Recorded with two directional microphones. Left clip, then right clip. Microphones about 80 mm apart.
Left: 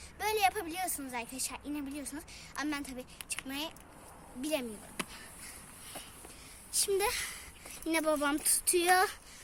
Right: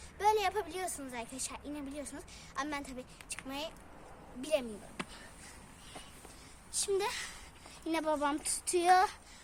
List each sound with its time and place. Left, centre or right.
0.2 s a sound: right
1.1 s a woman's voice: right
6.7 s speech: centre